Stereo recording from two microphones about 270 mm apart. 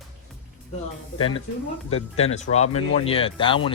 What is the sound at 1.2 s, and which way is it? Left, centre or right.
Speech, centre.